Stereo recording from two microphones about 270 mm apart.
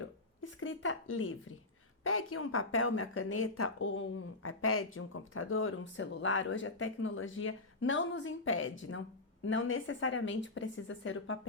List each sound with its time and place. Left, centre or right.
0.6 s speech: left